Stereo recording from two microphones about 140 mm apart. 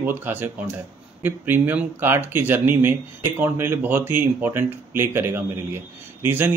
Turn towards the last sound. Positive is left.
turn(degrees=-15)  # may be behind; listen again after turning